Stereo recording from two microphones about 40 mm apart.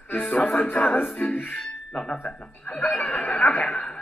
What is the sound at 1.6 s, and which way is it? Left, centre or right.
Speech, centre.